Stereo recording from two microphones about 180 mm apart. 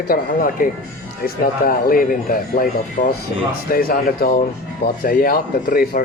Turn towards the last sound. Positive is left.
turn(degrees=55)  # may be behind; listen again after turning